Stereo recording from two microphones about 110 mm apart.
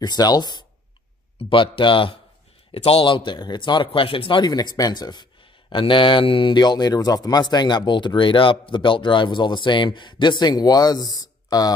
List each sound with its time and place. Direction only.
0.0 s speech: 40° left (ahead or behind)
1.4 s speech: 50° left (ahead or behind); by 11.7 s 35° left (ahead or behind)